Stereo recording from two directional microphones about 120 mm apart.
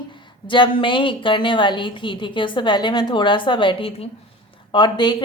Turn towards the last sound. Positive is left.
turn(degrees=40)  # may be behind; listen again after turning